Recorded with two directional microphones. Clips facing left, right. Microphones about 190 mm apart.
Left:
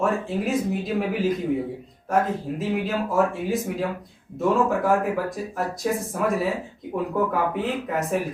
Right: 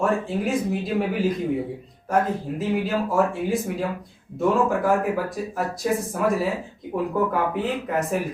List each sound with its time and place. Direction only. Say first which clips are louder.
0.0 s speech: right 1 dB; centre (ahead or behind)